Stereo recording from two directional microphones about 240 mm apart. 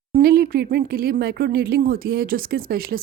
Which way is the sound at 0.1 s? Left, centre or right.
Right.